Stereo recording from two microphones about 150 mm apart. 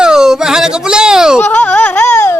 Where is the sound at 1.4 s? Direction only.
10° left (ahead or behind).